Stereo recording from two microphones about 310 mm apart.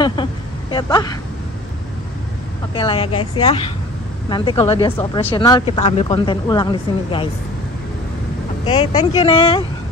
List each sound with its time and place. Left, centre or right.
0.0 s speech: centre
2.7 s speech: centre
8.6 s speech: centre